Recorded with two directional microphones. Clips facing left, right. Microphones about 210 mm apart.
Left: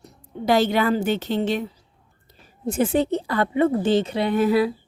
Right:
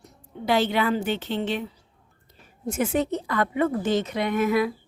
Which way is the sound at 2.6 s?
30° left (ahead or behind).